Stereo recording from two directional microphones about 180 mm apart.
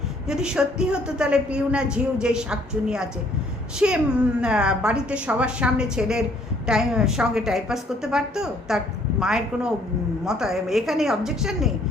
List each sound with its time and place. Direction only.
0.3 s a woman's voice: 5° right (ahead or behind)